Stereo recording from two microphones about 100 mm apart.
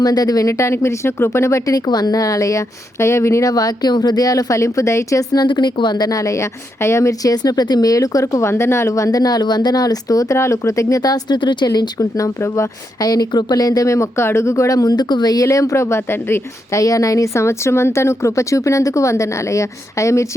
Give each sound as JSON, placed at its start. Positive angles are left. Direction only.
{"t": 0.0, "sound": "speech", "side_deg": 40}
{"t": 3.5, "sound": "speech", "side_deg": 40}
{"t": 16.8, "sound": "speech", "side_deg": 35}